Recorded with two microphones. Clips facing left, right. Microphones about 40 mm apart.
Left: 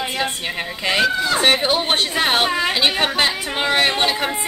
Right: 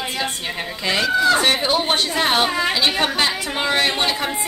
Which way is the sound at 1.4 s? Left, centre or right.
Centre.